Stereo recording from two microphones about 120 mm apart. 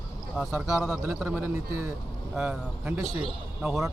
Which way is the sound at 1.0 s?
15° right (ahead or behind).